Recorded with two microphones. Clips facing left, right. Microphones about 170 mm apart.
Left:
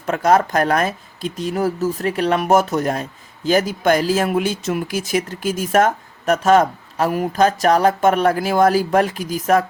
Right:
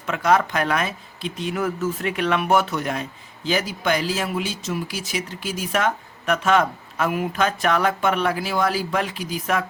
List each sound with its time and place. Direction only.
0.0 s speech: 40° left (ahead or behind)